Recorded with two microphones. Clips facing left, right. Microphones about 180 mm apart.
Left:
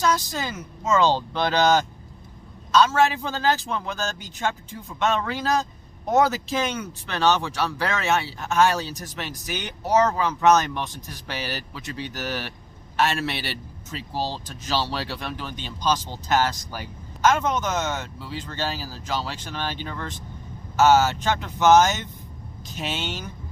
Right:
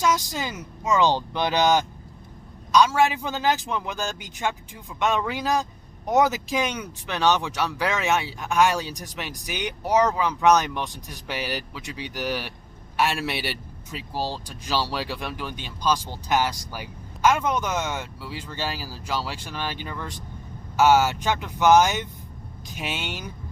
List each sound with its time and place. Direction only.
0.0 s a man's voice: 15° right (ahead or behind)